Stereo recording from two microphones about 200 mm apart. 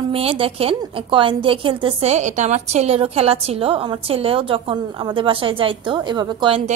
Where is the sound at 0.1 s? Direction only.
30° right (ahead or behind).